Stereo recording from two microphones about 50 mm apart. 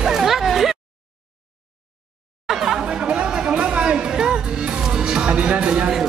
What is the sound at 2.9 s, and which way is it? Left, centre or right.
Music, centre.